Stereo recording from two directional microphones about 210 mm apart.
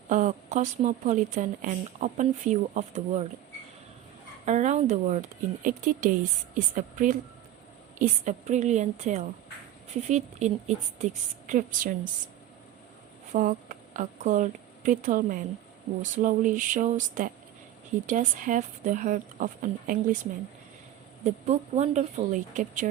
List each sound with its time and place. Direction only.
0.1 s a woman's voice: 35° right (ahead or behind)
4.4 s a woman's voice: 35° right (ahead or behind)
13.3 s a woman's voice: 40° right (ahead or behind)
21.2 s a woman's voice: 35° right (ahead or behind)